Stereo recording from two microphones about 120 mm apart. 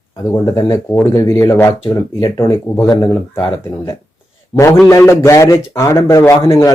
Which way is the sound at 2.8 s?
35° left (ahead or behind).